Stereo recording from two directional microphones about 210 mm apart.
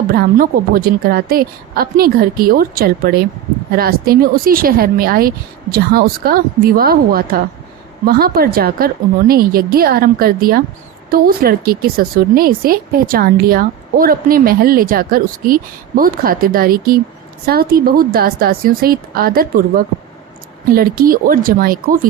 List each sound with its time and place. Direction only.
0.1 s speech: 45° right (ahead or behind)
20.7 s speech: 45° right (ahead or behind)